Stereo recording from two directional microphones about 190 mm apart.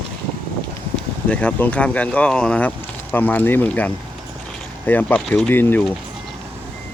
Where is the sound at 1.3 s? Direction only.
5° left (ahead or behind).